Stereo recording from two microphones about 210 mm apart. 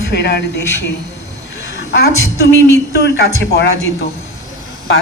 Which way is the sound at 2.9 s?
50° left (ahead or behind).